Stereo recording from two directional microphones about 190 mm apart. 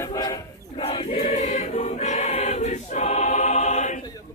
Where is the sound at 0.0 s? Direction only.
20° left (ahead or behind).